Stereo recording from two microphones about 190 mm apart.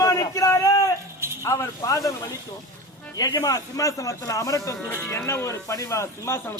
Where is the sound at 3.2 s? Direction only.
20° left (ahead or behind).